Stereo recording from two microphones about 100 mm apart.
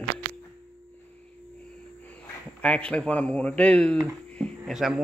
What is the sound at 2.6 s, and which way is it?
Speech, 10° left (ahead or behind).